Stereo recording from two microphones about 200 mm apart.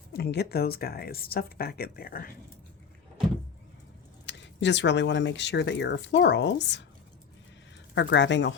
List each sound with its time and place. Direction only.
0.1 s speech: 55° left (ahead or behind)
4.3 s speech: 60° left (ahead or behind)
7.9 s speech: 65° left (ahead or behind)